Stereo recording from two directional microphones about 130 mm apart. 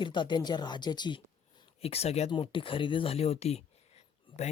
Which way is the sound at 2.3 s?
40° left (ahead or behind).